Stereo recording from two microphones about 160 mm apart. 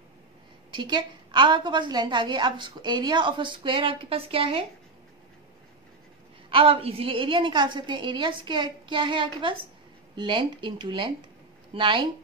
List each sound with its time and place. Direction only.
0.7 s a woman's voice: 30° right (ahead or behind)
6.5 s a woman's voice: 35° right (ahead or behind)